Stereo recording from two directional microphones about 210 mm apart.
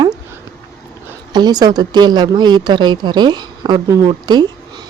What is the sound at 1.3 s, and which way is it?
Speech, 20° right (ahead or behind).